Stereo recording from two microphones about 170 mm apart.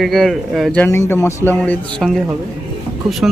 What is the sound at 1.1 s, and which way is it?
Speech, 15° left (ahead or behind).